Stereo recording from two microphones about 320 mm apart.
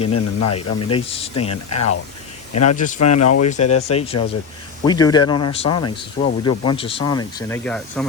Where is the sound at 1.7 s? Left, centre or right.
Left.